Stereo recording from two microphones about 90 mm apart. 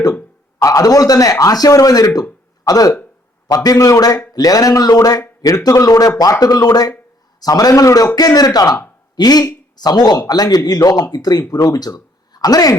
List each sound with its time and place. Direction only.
0.6 s a man's voice: 40° left (ahead or behind)